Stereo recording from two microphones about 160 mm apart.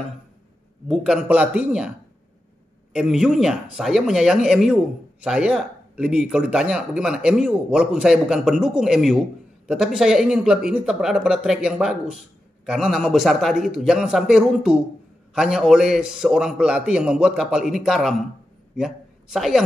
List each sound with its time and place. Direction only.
0.8 s speech: centre (ahead or behind)
2.9 s speech: 5° right (ahead or behind)